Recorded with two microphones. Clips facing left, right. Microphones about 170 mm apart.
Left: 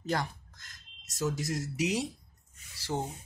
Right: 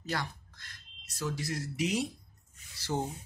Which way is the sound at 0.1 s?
45° left (ahead or behind).